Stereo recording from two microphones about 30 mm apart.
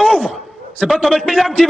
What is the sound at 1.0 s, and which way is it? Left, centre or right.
Speech, centre.